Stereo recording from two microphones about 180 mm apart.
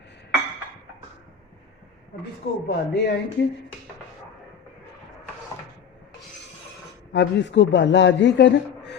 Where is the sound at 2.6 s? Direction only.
70° left (ahead or behind).